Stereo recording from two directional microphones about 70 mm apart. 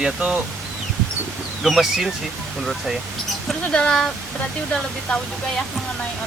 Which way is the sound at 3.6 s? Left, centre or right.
Centre.